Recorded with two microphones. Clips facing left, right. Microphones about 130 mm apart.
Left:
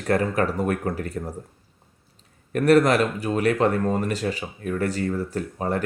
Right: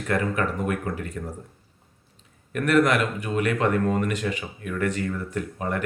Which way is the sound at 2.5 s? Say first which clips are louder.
Left 3 dB; 35° left (ahead or behind).